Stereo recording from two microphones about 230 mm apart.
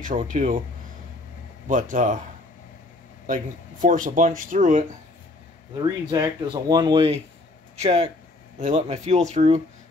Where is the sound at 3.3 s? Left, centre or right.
Right.